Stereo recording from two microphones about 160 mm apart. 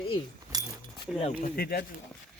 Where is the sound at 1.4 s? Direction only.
75° left (ahead or behind).